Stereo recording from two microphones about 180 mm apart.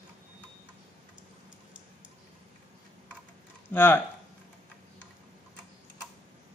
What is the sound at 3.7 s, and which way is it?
Speech, 10° left (ahead or behind).